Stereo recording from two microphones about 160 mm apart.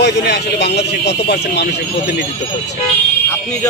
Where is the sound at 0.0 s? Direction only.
90° left.